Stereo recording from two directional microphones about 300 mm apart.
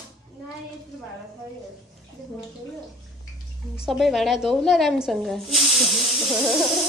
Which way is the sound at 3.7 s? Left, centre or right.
Centre.